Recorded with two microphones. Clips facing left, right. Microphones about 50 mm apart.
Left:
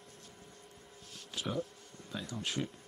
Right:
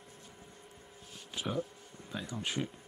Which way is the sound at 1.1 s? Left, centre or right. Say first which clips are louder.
Right 1 dB; centre.